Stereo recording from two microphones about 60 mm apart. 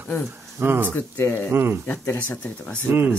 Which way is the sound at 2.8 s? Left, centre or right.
Right.